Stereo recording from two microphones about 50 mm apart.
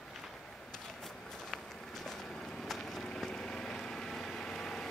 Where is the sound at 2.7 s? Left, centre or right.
Centre.